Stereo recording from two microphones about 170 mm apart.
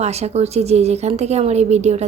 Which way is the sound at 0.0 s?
40° right (ahead or behind).